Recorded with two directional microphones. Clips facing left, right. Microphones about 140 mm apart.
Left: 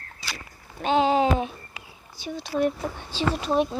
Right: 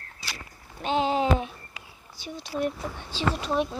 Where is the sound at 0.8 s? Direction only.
90° left.